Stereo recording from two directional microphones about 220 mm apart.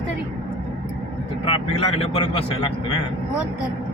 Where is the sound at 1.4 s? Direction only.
25° left (ahead or behind).